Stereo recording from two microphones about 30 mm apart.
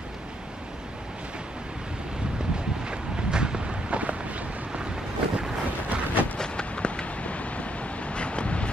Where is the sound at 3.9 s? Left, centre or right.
Right.